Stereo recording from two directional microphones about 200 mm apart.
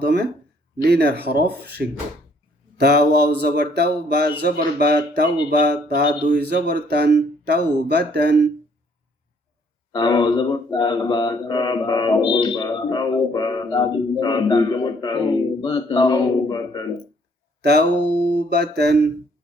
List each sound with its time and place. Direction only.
0.0 s speech: 55° right (ahead or behind)
2.7 s speech: 55° right (ahead or behind)
9.9 s mantra: 20° left (ahead or behind)
17.6 s a sound: 55° right (ahead or behind)
18.3 s speech: 55° right (ahead or behind)